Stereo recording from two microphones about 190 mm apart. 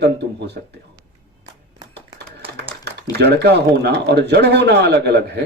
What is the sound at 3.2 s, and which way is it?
A man's voice, 60° right (ahead or behind).